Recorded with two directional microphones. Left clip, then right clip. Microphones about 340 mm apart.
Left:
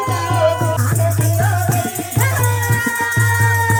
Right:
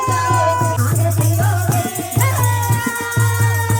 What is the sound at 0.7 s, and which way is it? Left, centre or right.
Music, centre.